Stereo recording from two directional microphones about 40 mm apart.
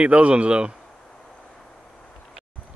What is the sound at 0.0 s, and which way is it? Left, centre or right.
Speech, right.